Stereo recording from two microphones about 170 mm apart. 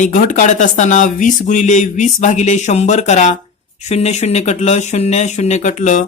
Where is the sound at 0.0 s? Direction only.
50° left (ahead or behind).